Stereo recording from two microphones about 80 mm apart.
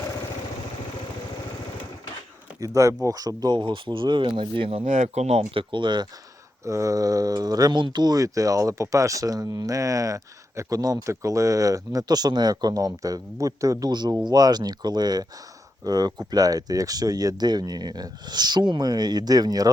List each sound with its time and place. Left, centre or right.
2.6 s speech: right
5.5 s speech: right
6.7 s speech: right
7.8 s speech: right
11.0 s speech: right
14.3 s speech: right